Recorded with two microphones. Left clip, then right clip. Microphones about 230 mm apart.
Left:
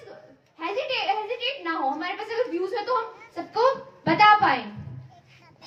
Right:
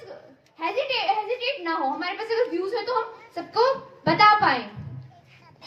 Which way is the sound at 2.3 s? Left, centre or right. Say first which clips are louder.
Right 3 dB; right.